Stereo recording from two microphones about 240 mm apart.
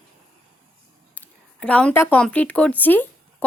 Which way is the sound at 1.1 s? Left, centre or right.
Centre.